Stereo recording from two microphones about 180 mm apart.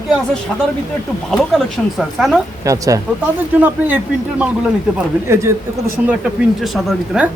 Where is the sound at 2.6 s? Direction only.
20° right (ahead or behind).